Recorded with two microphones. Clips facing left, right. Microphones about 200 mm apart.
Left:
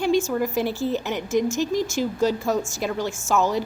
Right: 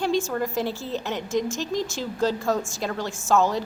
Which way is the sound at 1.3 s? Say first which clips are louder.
Left 4 dB; 5° left (ahead or behind).